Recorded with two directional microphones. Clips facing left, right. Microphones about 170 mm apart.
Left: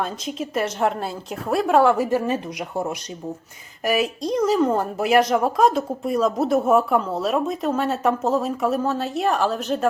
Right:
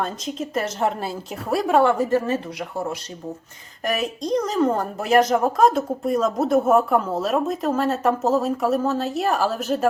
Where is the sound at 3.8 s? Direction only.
5° left (ahead or behind).